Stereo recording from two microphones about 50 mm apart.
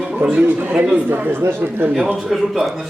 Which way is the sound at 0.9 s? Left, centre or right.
Right.